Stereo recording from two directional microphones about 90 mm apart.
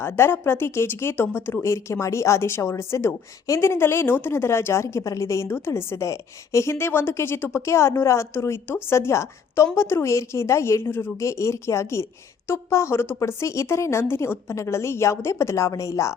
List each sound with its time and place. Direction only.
0.0 s a woman's voice: 25° left (ahead or behind)